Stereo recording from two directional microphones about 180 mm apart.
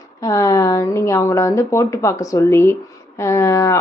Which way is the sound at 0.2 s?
20° left (ahead or behind).